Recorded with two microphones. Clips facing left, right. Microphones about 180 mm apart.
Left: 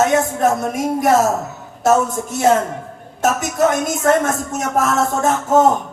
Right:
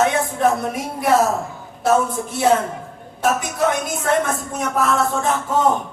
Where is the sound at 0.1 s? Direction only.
45° left (ahead or behind).